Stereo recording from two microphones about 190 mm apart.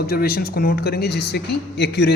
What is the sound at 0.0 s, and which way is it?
Speech, 55° left (ahead or behind).